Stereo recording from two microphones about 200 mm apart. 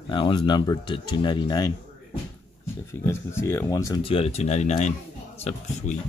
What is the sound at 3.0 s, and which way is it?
Speech, 15° left (ahead or behind).